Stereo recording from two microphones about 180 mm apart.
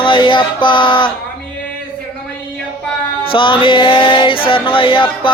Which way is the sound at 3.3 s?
30° left (ahead or behind).